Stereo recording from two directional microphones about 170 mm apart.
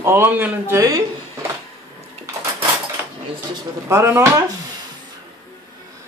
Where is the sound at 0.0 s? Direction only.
15° right (ahead or behind).